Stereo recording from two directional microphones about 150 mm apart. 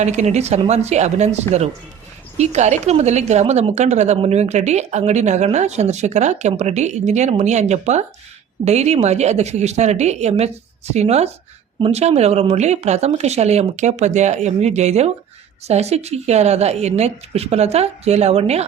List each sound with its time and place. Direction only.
0.0 s a woman's voice: 50° right (ahead or behind)